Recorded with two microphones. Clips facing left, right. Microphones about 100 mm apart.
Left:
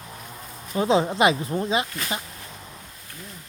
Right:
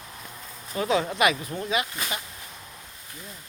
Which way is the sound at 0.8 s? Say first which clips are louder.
Left 4 dB; 25° left (ahead or behind).